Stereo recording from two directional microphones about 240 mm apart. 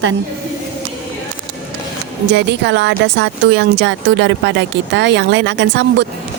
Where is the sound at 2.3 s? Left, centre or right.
Right.